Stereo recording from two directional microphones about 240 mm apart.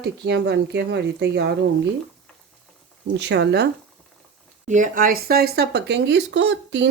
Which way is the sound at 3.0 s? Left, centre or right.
Right.